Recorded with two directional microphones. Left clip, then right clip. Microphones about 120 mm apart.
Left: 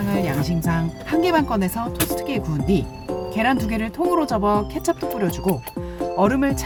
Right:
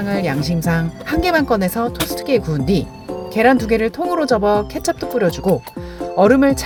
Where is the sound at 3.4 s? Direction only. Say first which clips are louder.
Right 9 dB; 30° right (ahead or behind).